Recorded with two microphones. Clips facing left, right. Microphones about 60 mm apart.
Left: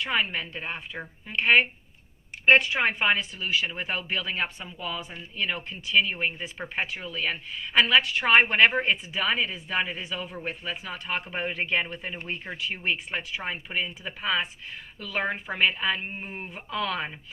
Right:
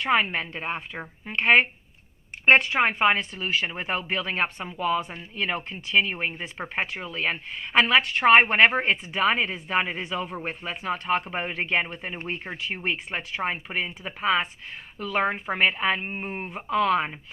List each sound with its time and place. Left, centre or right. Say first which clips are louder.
0.0 s speech: right 4 dB; right
2.8 s speech: right 3 dB; right
4.4 s speech: right 8 dB; right
5.5 s speech: right 2 dB; right
8.9 s speech: right 3 dB; right
11.3 s speech: right 1 dB; right